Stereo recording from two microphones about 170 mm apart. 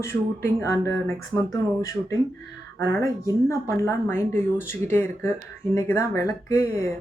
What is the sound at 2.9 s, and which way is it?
Speech, 15° left (ahead or behind).